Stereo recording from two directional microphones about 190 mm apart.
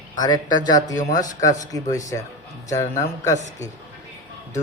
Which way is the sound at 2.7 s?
15° left (ahead or behind).